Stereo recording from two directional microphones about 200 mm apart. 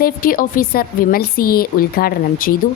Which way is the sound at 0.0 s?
45° left (ahead or behind).